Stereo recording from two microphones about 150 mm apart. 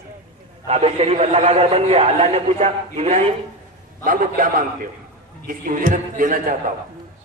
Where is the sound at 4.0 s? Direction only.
60° right (ahead or behind).